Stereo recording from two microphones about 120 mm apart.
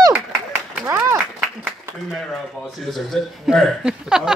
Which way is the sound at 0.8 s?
20° right (ahead or behind).